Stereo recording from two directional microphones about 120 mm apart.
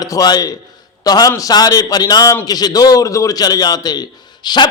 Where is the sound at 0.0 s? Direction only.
30° left (ahead or behind).